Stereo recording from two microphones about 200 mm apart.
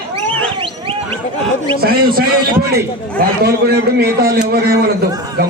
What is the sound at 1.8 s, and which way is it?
A man's voice, 50° right (ahead or behind).